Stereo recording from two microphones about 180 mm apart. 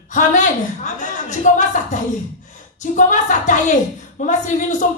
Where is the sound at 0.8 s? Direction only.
45° left (ahead or behind).